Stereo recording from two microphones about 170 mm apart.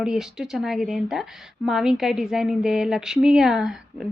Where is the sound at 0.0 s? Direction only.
5° right (ahead or behind).